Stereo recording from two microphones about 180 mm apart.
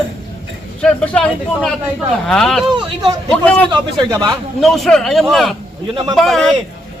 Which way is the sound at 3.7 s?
20° right (ahead or behind).